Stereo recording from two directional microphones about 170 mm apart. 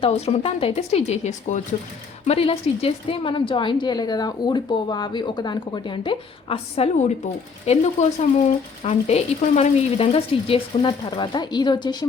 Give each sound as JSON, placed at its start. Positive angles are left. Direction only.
{"t": 0.0, "sound": "a woman's voice", "side_deg": 40}